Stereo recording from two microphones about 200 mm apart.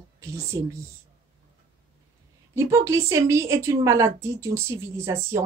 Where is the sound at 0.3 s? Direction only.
15° right (ahead or behind).